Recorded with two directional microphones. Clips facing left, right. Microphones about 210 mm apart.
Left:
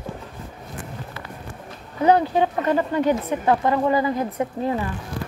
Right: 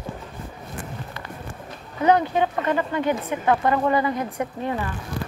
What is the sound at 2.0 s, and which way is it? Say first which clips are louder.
Speech: left 1 dB; 35° left (ahead or behind).